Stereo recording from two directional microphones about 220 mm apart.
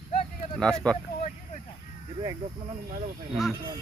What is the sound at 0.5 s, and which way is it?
Speech, 5° left (ahead or behind).